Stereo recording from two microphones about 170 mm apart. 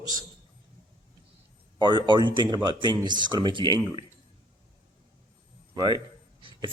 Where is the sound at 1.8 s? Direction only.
25° right (ahead or behind).